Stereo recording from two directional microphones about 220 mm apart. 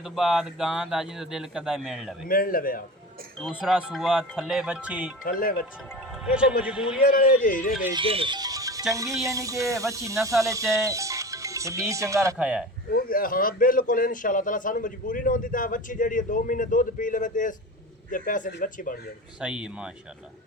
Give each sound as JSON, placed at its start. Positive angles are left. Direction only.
{"t": 0.0, "sound": "speech", "side_deg": 0}
{"t": 2.2, "sound": "a man's voice", "side_deg": 40}
{"t": 3.4, "sound": "speech", "side_deg": -5}
{"t": 5.2, "sound": "a man's voice", "side_deg": 40}
{"t": 5.9, "sound": "speech", "side_deg": 0}
{"t": 7.0, "sound": "a man's voice", "side_deg": 40}
{"t": 7.9, "sound": "speech", "side_deg": -25}
{"t": 12.9, "sound": "a man's voice", "side_deg": 40}
{"t": 19.4, "sound": "speech", "side_deg": -5}